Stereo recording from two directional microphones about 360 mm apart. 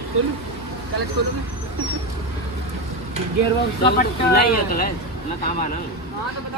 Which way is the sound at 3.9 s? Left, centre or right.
Left.